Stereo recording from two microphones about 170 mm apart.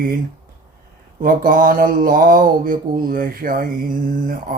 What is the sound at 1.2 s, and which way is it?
Mantra, 55° right (ahead or behind).